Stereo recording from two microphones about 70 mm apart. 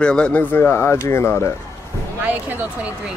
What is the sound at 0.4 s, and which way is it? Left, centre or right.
Speech, left.